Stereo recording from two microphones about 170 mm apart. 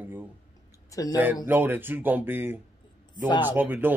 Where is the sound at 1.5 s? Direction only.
10° right (ahead or behind).